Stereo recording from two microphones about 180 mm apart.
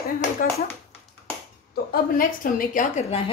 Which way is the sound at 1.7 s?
55° left (ahead or behind).